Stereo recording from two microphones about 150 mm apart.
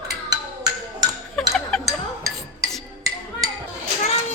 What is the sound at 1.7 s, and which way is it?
Music, 5° left (ahead or behind).